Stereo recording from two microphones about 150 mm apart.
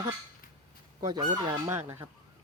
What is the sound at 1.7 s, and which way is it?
Speech, 15° right (ahead or behind).